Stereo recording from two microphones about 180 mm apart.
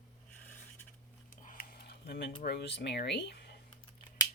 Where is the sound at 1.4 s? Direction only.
55° left (ahead or behind).